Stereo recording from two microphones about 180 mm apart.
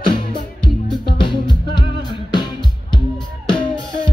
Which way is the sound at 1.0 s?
25° left (ahead or behind).